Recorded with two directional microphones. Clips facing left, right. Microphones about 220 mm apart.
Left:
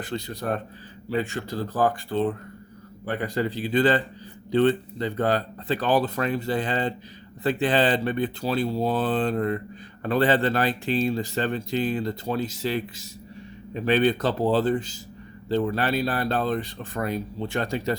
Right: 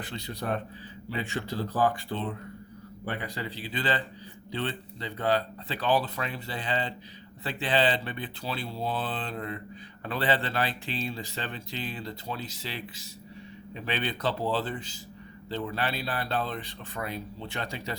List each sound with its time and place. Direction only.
0.0 s speech: 45° left (ahead or behind)